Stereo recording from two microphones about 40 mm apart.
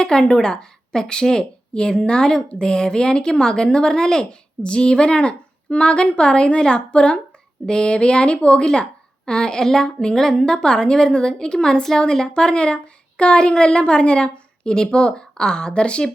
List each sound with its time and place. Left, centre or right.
0.0 s a woman's voice: centre